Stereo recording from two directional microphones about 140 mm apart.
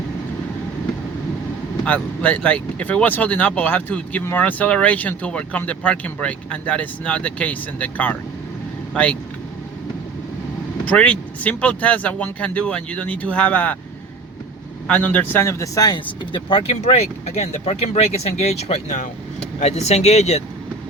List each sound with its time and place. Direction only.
1.8 s speech: 10° left (ahead or behind)
10.8 s speech: 10° left (ahead or behind)
14.8 s speech: 10° left (ahead or behind); by 16.9 s 40° left (ahead or behind)
17.4 s speech: 50° left (ahead or behind)